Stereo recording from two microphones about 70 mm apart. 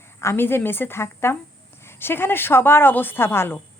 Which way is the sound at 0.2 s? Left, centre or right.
Left.